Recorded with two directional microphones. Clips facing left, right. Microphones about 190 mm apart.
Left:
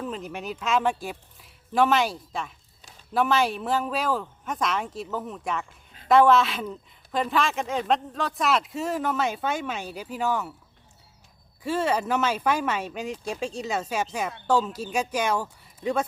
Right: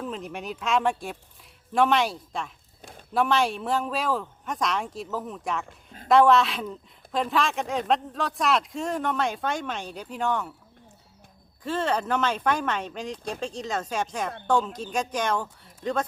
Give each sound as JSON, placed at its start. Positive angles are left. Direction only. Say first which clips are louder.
{"t": 0.0, "sound": "a man's voice", "louder": "left 1 dB", "side_deg": 0}
{"t": 5.6, "sound": "a sound", "louder": "right 7 dB", "side_deg": -45}
{"t": 6.1, "sound": "a man's voice", "louder": "even", "side_deg": 0}
{"t": 11.6, "sound": "speech", "louder": "left 1 dB", "side_deg": 10}